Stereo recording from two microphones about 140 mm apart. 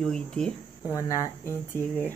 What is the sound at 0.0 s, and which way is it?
Speech, 5° left (ahead or behind).